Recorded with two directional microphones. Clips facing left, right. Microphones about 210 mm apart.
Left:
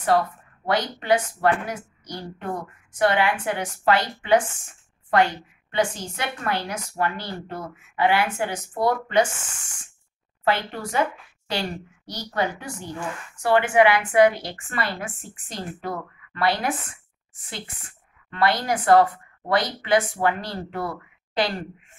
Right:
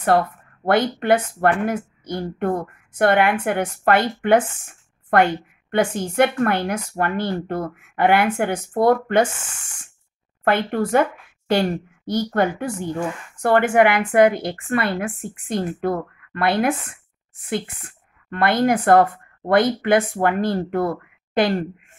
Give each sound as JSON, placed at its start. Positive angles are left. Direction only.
{"t": 0.7, "sound": "a woman's voice", "side_deg": -55}
{"t": 10.4, "sound": "a woman's voice", "side_deg": -55}